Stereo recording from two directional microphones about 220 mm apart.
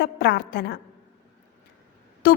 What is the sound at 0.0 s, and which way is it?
Speech, 50° left (ahead or behind).